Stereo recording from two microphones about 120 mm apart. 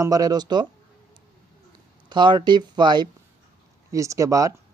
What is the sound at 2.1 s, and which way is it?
Speech, 40° right (ahead or behind).